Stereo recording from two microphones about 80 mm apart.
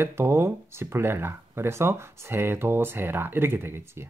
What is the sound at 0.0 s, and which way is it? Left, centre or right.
Speech, right.